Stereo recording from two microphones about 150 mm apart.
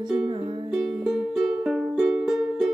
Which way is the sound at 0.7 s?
5° right (ahead or behind).